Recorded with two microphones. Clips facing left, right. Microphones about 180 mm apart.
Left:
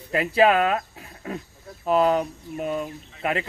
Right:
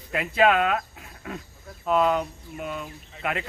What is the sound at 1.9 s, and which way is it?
Speech, 35° left (ahead or behind).